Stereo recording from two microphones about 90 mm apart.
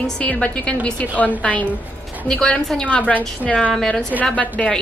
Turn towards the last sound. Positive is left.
turn(degrees=15)  # may be behind; listen again after turning